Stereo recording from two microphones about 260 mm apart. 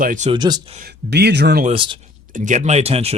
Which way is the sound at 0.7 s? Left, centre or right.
Right.